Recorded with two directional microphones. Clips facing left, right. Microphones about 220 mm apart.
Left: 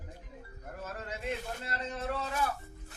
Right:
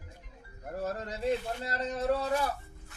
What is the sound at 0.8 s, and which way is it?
A man's voice, 35° right (ahead or behind).